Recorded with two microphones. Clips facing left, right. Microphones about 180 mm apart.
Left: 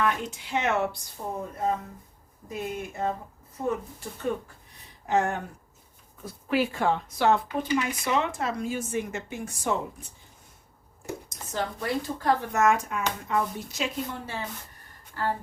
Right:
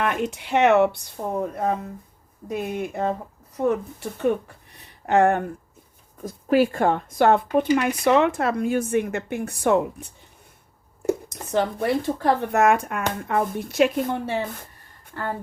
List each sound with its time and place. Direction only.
0.0 s speech: 60° right (ahead or behind)
6.2 s speech: 45° right (ahead or behind); by 10.1 s 65° right (ahead or behind)
11.3 s speech: 65° right (ahead or behind)